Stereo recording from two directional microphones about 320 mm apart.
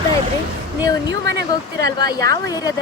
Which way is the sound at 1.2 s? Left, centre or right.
Right.